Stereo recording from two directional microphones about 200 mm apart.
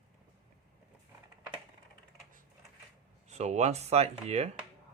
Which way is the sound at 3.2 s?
35° right (ahead or behind).